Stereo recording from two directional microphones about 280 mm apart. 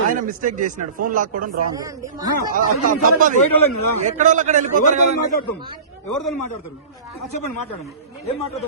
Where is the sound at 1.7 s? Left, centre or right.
Centre.